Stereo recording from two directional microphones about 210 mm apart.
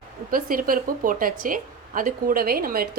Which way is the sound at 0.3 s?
40° right (ahead or behind).